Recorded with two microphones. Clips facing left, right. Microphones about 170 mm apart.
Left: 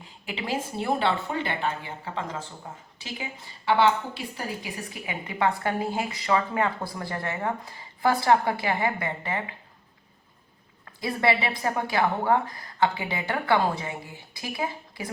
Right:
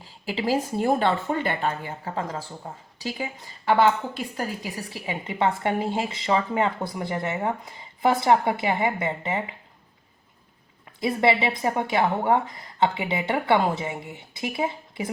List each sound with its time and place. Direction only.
0.0 s a woman's voice: 35° right (ahead or behind)
11.0 s a woman's voice: 25° right (ahead or behind)